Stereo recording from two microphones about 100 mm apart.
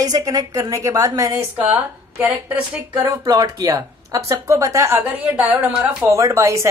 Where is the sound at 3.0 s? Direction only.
40° right (ahead or behind).